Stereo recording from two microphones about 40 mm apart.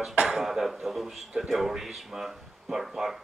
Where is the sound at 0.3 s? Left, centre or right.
Centre.